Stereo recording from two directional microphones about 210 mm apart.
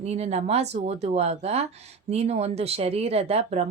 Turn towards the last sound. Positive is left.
turn(degrees=-30)  # may be behind; listen again after turning